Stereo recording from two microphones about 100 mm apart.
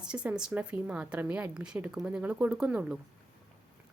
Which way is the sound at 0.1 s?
10° right (ahead or behind).